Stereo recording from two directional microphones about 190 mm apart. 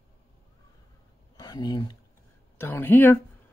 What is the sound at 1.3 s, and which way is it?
Speech, 20° left (ahead or behind).